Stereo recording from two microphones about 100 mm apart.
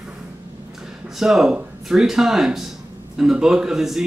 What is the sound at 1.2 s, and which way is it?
Speech, 5° right (ahead or behind).